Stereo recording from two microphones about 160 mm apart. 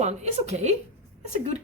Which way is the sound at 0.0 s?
45° right (ahead or behind).